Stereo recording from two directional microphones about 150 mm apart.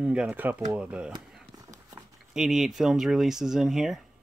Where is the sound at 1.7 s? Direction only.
25° right (ahead or behind).